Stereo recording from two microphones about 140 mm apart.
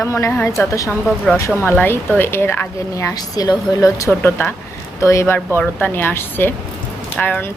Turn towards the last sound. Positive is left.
turn(degrees=10)  # may be behind; listen again after turning